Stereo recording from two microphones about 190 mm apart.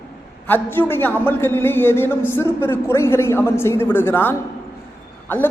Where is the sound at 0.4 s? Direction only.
10° left (ahead or behind).